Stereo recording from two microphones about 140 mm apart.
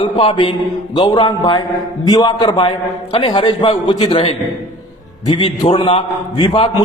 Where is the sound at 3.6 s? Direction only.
35° left (ahead or behind).